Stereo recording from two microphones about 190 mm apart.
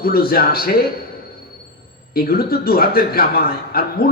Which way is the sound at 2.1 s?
50° left (ahead or behind).